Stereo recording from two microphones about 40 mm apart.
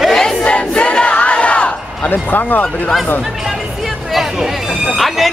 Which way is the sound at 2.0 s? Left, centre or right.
Left.